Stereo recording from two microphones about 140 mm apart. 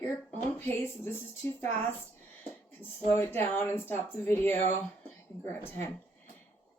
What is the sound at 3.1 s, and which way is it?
Speech, 15° left (ahead or behind).